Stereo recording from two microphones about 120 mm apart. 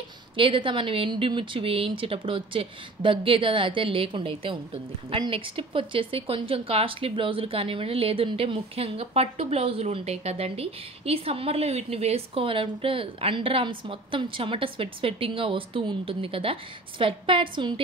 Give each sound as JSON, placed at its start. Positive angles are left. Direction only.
{"t": 0.4, "sound": "speech", "side_deg": -45}